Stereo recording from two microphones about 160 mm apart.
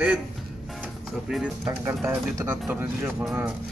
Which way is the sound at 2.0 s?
15° right (ahead or behind).